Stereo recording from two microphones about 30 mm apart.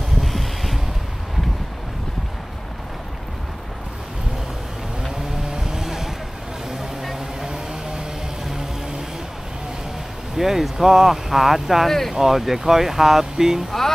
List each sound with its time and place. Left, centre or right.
0.2 s a sound: centre
5.5 s vehicle: right; by 7.2 s centre
10.3 s speech: centre
13.7 s speech: centre